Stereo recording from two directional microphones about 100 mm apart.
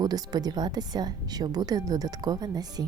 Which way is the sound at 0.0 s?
40° right (ahead or behind).